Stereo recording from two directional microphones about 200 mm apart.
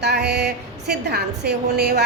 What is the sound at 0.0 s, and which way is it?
A woman's voice, 55° right (ahead or behind).